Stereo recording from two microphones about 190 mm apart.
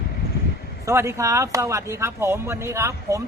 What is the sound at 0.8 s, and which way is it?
Speech, 15° right (ahead or behind).